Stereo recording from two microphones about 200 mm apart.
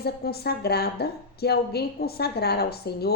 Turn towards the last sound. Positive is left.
turn(degrees=50)  # may be behind; listen again after turning